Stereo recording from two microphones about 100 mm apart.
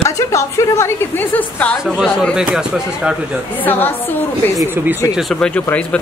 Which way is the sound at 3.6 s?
20° left (ahead or behind).